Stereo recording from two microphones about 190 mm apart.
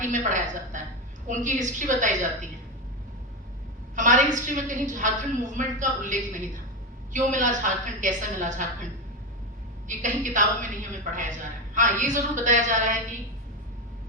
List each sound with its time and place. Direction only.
0.0 s a woman's voice: 40° right (ahead or behind)
3.9 s a woman's voice: 40° right (ahead or behind)
10.0 s a woman's voice: 40° right (ahead or behind)